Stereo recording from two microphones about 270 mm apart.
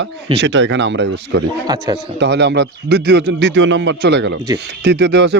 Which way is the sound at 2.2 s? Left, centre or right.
Right.